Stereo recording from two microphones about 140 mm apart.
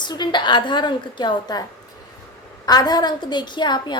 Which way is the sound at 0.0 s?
30° left (ahead or behind).